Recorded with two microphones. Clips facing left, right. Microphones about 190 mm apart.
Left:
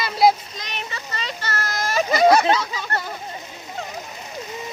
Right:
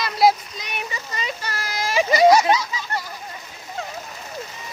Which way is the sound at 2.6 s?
60° left (ahead or behind).